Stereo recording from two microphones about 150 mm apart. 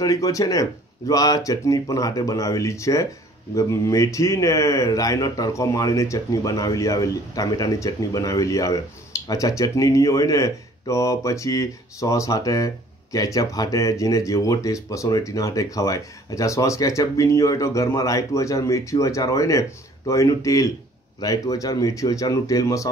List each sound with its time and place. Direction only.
0.0 s speech: 20° left (ahead or behind)